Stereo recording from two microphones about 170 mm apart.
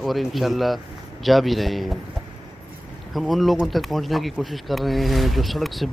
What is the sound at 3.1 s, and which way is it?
Speech, centre (ahead or behind).